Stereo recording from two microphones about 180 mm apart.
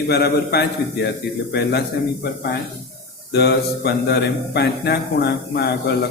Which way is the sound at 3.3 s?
65° left (ahead or behind).